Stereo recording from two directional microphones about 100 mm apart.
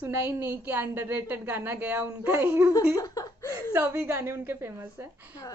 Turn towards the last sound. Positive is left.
turn(degrees=-20)  # may be behind; listen again after turning